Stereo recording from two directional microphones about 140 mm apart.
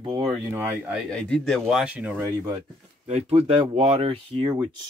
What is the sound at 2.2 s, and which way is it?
Speech, 25° right (ahead or behind).